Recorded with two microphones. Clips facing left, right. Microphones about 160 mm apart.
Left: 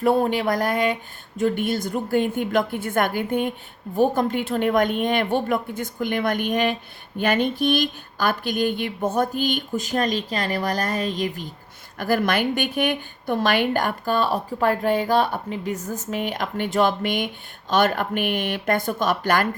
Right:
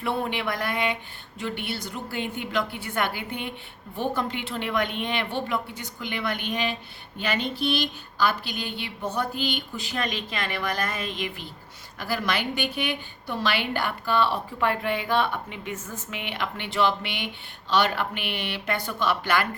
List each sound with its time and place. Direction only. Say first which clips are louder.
0.0 s a woman's voice: left 8 dB; 40° left (ahead or behind)